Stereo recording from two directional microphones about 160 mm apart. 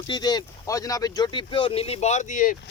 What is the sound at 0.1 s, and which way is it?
Speech, 25° left (ahead or behind).